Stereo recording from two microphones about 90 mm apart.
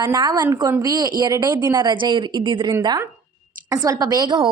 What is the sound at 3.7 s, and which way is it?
Speech, 45° right (ahead or behind).